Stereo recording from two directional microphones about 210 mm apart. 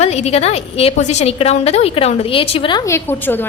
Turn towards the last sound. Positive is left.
turn(degrees=10)  # may be behind; listen again after turning